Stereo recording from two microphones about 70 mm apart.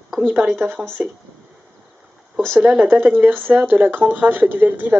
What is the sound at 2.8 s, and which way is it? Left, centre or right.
Speech, right.